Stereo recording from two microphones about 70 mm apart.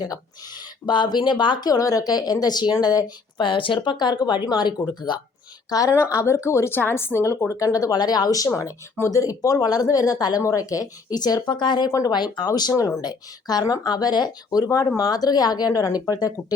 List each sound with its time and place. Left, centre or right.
0.9 s speech: left
2.8 s speech: left
3.9 s speech: left
5.7 s speech: left
6.1 s a woman's voice: left
9.0 s speech: left
10.4 s speech: left
11.4 s speech: left
12.7 s a woman's voice: left
13.0 s speech: left